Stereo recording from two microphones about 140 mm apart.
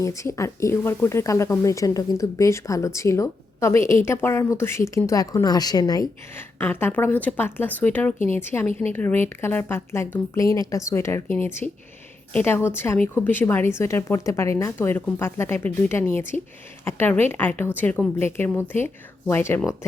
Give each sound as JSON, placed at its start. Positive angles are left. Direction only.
{"t": 0.0, "sound": "speech", "side_deg": 20}
{"t": 6.3, "sound": "a woman's voice", "side_deg": 15}